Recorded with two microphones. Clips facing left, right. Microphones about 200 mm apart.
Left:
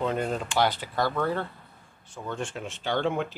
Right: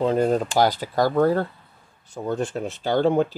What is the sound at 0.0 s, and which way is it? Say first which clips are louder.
Speech: right 8 dB; 35° right (ahead or behind).